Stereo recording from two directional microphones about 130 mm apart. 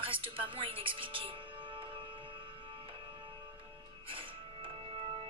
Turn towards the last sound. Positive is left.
turn(degrees=-45)  # may be behind; listen again after turning